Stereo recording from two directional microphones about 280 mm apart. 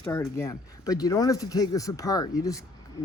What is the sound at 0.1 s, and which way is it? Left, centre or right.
Speech, centre.